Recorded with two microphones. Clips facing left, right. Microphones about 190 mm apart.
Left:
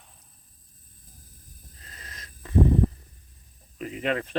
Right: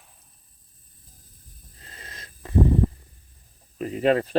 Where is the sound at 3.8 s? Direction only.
35° right (ahead or behind).